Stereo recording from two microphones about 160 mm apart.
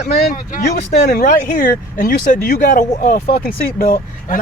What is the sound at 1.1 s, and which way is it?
Speech, 55° left (ahead or behind).